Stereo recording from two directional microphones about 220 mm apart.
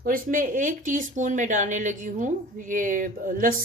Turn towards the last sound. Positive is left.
turn(degrees=-35)  # may be behind; listen again after turning